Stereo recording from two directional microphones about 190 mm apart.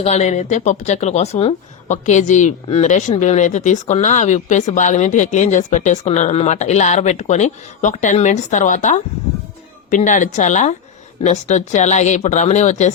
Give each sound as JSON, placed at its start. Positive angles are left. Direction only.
{"t": 0.0, "sound": "speech", "side_deg": 35}